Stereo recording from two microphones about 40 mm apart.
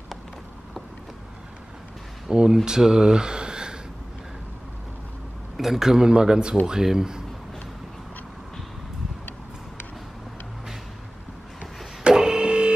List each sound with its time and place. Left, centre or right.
2.5 s speech: centre
5.6 s a man's voice: centre
12.0 s printer: centre